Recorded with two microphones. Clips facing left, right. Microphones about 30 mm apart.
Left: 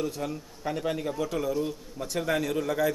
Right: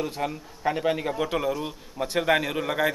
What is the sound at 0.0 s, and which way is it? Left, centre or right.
Speech, right.